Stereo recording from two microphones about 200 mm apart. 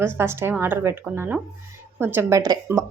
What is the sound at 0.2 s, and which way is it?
A woman's voice, 10° right (ahead or behind).